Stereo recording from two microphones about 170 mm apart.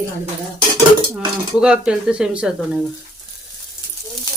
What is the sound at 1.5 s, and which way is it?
Speech, 5° right (ahead or behind).